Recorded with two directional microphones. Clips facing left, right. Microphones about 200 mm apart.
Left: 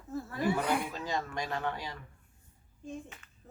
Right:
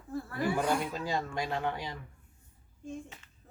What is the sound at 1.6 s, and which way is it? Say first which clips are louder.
Speech: right 2 dB; 15° right (ahead or behind).